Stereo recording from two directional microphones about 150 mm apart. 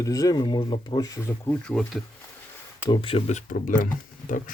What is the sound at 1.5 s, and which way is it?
Speech, 5° left (ahead or behind).